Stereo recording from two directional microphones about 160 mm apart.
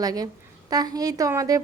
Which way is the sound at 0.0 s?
25° right (ahead or behind).